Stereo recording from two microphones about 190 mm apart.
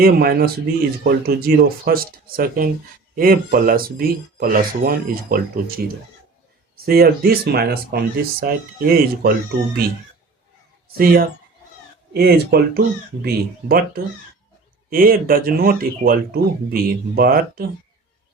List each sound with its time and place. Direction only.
0.0 s speech: 55° right (ahead or behind)
10.9 s speech: 55° right (ahead or behind)